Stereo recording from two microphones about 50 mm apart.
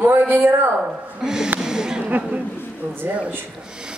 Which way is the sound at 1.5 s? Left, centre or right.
Centre.